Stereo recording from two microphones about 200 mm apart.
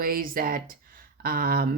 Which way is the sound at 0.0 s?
45° right (ahead or behind).